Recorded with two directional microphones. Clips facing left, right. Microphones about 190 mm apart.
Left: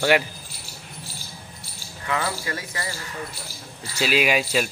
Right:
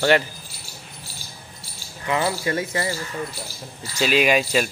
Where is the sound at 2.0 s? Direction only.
20° right (ahead or behind).